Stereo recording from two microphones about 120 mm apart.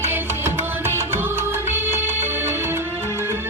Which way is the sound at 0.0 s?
20° right (ahead or behind).